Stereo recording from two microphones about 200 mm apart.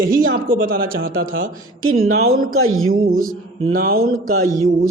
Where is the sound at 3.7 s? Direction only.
50° right (ahead or behind).